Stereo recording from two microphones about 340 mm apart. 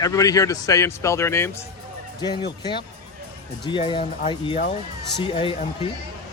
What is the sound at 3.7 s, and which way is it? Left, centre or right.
Speech, centre.